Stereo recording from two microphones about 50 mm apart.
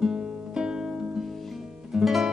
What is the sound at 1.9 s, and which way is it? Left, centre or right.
Music, centre.